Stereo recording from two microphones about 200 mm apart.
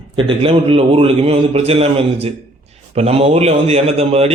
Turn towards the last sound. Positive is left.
turn(degrees=-30)  # may be behind; listen again after turning